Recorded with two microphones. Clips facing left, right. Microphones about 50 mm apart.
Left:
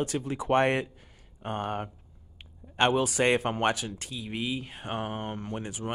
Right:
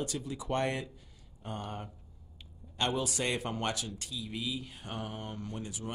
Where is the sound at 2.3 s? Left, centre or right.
Left.